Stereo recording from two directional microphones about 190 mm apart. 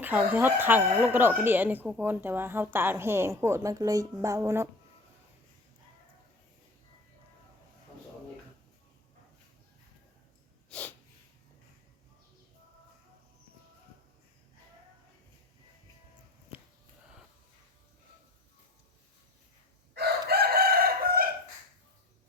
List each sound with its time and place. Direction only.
0.0 s speech: 10° right (ahead or behind)
10.7 s snort: 10° left (ahead or behind)
19.9 s crowing: 55° right (ahead or behind)